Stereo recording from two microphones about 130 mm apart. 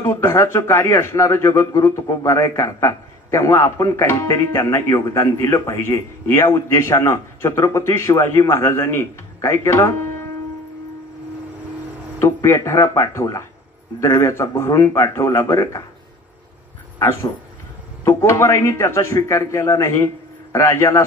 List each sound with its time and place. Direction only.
0.0 s a man's voice: 20° left (ahead or behind)
12.2 s a man's voice: 25° left (ahead or behind)
17.0 s a man's voice: 20° left (ahead or behind)